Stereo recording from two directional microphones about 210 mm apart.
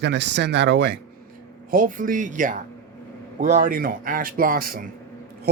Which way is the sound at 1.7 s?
40° right (ahead or behind).